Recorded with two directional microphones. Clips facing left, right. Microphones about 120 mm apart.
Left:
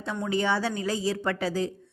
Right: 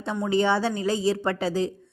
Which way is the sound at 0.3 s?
30° right (ahead or behind).